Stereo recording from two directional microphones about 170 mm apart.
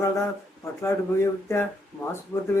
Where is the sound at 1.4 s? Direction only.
15° left (ahead or behind).